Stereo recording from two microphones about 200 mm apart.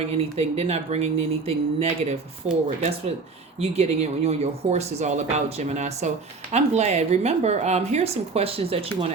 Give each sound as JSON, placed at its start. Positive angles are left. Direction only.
{"t": 0.0, "sound": "a woman's voice", "side_deg": -30}